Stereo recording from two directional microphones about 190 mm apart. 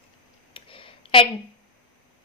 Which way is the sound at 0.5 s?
25° left (ahead or behind).